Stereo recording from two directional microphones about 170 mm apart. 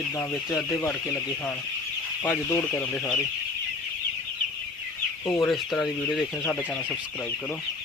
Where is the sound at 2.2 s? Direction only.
15° left (ahead or behind).